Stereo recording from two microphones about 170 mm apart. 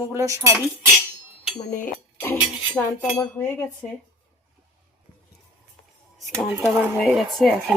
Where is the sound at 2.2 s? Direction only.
15° left (ahead or behind).